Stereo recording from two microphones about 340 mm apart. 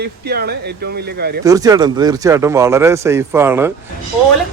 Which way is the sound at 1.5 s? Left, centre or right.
Centre.